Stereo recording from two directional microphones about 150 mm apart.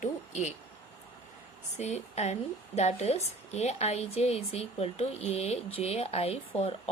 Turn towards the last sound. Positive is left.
turn(degrees=40)  # may be behind; listen again after turning